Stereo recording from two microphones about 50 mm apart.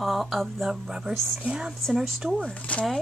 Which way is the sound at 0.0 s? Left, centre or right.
Centre.